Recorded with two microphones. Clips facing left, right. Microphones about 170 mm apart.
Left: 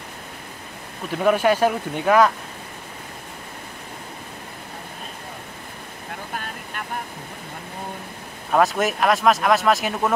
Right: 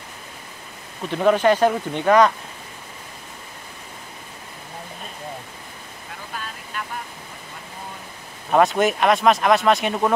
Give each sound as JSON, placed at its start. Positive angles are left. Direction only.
{"t": 1.1, "sound": "speech", "side_deg": 5}
{"t": 6.3, "sound": "vehicle", "side_deg": 55}
{"t": 8.5, "sound": "speech", "side_deg": 0}